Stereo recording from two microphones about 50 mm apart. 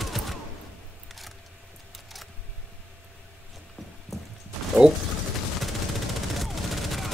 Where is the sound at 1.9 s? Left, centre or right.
Centre.